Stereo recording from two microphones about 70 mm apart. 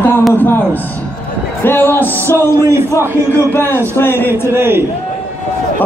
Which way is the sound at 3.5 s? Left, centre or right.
Left.